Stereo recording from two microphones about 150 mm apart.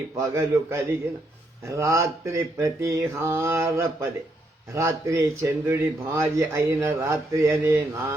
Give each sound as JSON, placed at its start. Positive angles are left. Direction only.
{"t": 0.2, "sound": "speech", "side_deg": -20}